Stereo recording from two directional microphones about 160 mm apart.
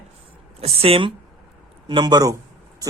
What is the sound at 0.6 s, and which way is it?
A woman's voice, 35° right (ahead or behind).